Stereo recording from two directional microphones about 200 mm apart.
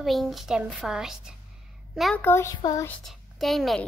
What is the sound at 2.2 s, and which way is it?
Speech, 15° left (ahead or behind).